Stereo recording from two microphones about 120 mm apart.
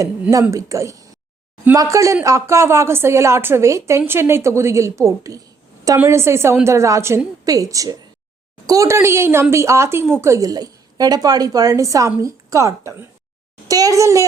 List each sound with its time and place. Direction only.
0.0 s a woman's voice: 25° right (ahead or behind)